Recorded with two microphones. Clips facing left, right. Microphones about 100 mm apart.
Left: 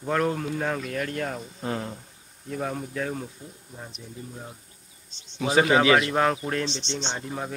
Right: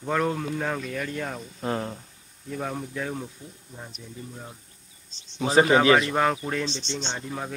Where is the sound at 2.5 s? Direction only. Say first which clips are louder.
Left 1 dB; centre (ahead or behind).